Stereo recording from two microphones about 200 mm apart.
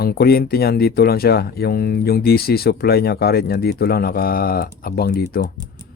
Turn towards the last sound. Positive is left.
turn(degrees=50)  # may be behind; listen again after turning